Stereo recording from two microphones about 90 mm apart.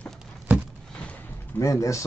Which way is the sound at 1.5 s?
35° left (ahead or behind).